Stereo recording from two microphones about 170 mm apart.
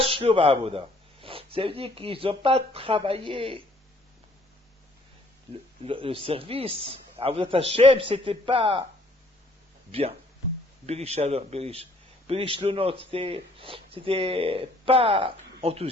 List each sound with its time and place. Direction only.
0.0 s speech: 35° right (ahead or behind)
5.8 s a man's voice: 30° right (ahead or behind)
9.9 s a man's voice: 35° right (ahead or behind)